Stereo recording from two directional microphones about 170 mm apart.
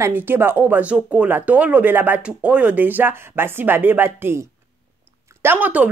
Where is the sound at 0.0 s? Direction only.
10° right (ahead or behind).